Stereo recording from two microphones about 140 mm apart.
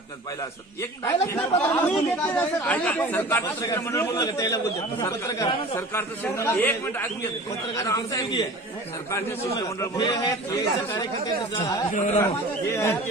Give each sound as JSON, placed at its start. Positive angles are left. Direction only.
{"t": 1.0, "sound": "a man's voice", "side_deg": 20}
{"t": 12.2, "sound": "a man's voice", "side_deg": 20}